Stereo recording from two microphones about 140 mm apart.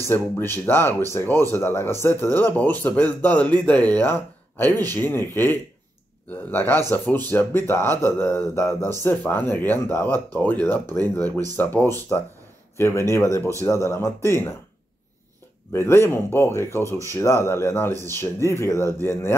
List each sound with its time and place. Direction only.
0.1 s speech: 15° left (ahead or behind)
15.7 s speech: 15° left (ahead or behind)